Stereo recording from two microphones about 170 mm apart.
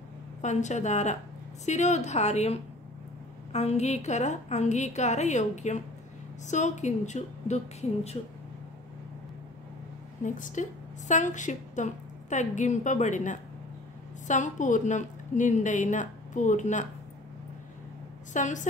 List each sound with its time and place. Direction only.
0.4 s a woman's voice: 45° left (ahead or behind)
10.2 s a woman's voice: 50° left (ahead or behind)
18.3 s a woman's voice: 45° left (ahead or behind)